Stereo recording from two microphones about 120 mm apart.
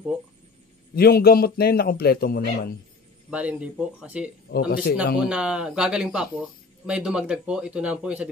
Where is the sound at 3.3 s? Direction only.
10° right (ahead or behind).